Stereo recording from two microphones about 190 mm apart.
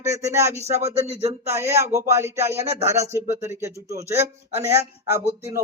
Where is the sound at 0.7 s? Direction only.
35° right (ahead or behind).